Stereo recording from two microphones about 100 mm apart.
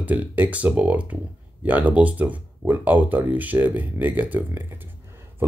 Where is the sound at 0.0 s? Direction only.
15° right (ahead or behind).